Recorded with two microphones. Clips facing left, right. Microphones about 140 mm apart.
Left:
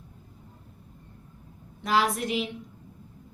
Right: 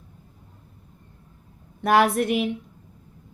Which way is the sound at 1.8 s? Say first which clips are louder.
Right 6 dB; 60° right (ahead or behind).